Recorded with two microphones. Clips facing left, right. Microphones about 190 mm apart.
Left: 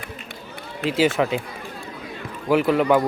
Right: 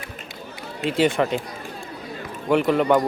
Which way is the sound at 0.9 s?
Centre (ahead or behind).